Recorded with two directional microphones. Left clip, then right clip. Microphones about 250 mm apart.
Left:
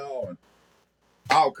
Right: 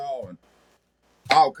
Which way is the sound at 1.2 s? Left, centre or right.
Centre.